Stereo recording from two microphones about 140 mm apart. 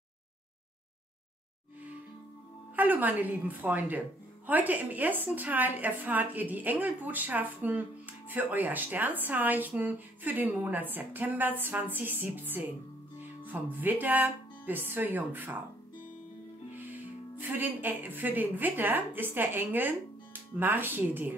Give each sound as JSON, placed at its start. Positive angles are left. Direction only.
{"t": 2.7, "sound": "speech", "side_deg": -10}
{"t": 16.7, "sound": "speech", "side_deg": -15}